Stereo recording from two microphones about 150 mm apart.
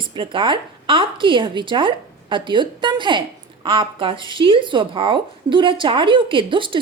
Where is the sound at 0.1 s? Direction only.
35° right (ahead or behind).